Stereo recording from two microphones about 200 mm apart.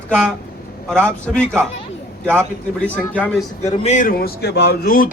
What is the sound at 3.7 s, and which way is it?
Speech, 35° left (ahead or behind).